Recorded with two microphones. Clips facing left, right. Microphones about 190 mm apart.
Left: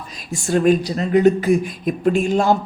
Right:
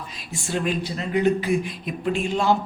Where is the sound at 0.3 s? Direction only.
45° left (ahead or behind).